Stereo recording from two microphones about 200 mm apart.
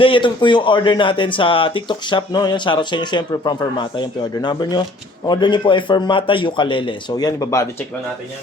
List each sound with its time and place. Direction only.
0.0 s speech: 25° left (ahead or behind)